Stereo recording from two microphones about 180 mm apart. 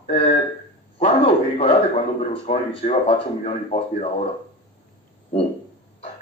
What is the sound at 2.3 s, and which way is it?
Speech, 30° left (ahead or behind).